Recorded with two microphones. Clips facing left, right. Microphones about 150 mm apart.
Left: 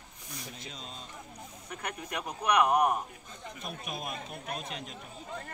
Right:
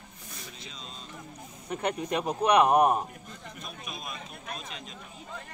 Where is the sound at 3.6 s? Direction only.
60° left (ahead or behind).